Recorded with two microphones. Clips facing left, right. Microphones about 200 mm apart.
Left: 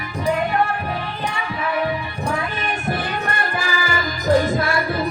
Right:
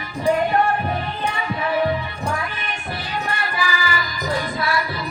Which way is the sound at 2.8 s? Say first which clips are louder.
Left 2 dB; 50° left (ahead or behind).